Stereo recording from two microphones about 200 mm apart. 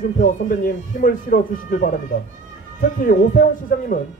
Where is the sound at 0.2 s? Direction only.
45° left (ahead or behind).